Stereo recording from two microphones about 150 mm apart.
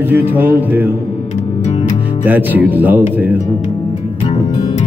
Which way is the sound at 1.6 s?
50° left (ahead or behind).